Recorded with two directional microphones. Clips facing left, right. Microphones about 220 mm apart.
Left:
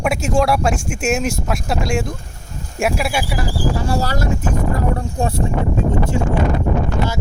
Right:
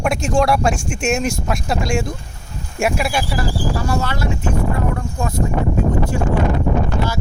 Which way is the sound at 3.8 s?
35° left (ahead or behind).